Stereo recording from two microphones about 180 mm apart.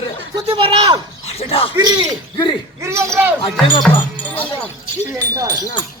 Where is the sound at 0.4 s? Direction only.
30° right (ahead or behind).